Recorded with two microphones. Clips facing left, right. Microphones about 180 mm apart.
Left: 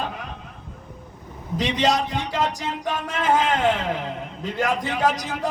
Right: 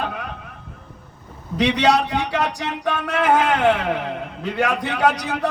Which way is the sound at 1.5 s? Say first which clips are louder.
Right 4 dB; 65° right (ahead or behind).